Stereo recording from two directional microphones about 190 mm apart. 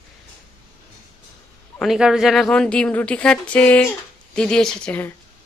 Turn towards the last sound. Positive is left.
turn(degrees=5)  # may be behind; listen again after turning